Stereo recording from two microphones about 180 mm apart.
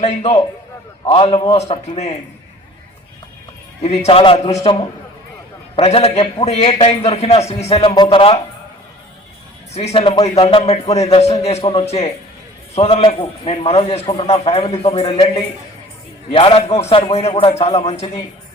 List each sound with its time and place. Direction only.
0.0 s a man's voice: 35° left (ahead or behind)
3.8 s a man's voice: 35° left (ahead or behind)
9.7 s a man's voice: 35° left (ahead or behind)
16.3 s a man's voice: 30° left (ahead or behind)